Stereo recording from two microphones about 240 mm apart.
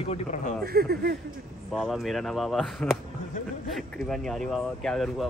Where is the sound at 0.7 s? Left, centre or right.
Right.